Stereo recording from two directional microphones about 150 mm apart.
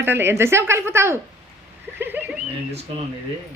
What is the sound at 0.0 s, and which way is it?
Speech, 15° right (ahead or behind).